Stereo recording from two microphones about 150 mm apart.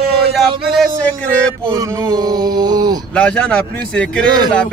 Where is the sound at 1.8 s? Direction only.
25° right (ahead or behind).